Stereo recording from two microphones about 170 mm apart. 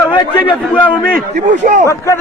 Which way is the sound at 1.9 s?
15° left (ahead or behind).